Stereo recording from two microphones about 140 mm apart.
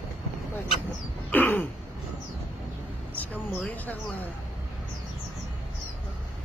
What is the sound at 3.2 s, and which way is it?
Speech, 10° left (ahead or behind).